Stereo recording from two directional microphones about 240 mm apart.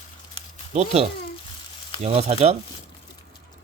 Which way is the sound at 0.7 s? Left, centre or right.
Right.